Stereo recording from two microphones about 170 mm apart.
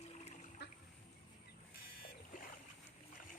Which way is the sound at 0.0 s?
40° left (ahead or behind).